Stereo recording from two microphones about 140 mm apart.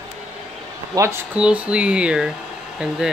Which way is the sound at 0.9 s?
25° right (ahead or behind).